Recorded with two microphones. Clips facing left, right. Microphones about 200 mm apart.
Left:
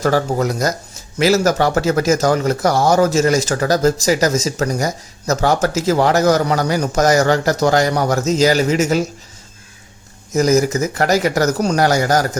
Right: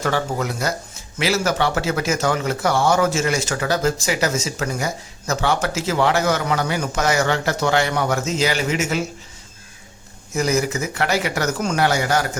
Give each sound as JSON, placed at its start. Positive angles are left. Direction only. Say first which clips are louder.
{"t": 0.0, "sound": "speech", "louder": "left 6 dB", "side_deg": 40}
{"t": 10.3, "sound": "speech", "louder": "left 6 dB", "side_deg": 40}